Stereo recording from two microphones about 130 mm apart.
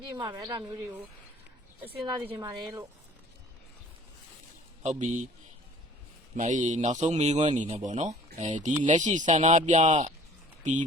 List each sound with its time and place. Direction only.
0.0 s speech: 35° right (ahead or behind)
2.3 s speech: 30° right (ahead or behind)
4.8 s a man's voice: 65° right (ahead or behind)
6.3 s a man's voice: 70° right (ahead or behind)